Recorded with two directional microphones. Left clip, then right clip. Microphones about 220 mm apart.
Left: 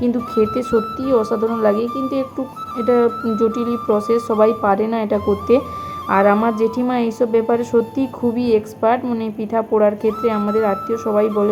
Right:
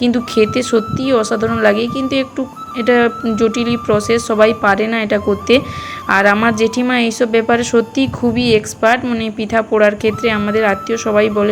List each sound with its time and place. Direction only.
0.0 s a woman's voice: 15° right (ahead or behind)
6.1 s speech: 20° right (ahead or behind)
6.6 s a woman's voice: 10° right (ahead or behind)